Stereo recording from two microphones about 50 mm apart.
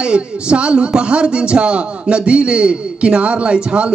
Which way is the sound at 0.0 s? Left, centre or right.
Right.